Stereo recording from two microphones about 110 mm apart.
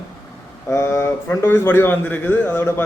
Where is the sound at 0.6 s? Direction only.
20° left (ahead or behind).